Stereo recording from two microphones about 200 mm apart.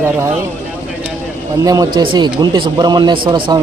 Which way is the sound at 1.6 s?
20° right (ahead or behind).